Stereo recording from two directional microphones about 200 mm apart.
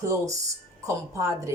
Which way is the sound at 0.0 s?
15° right (ahead or behind).